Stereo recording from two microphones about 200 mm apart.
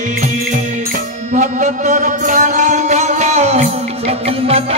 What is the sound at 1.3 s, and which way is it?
Music, 35° right (ahead or behind).